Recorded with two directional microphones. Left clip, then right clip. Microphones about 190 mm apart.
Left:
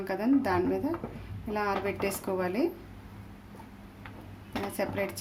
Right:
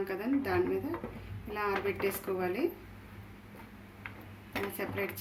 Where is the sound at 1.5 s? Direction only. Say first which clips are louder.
Left 2 dB; 60° left (ahead or behind).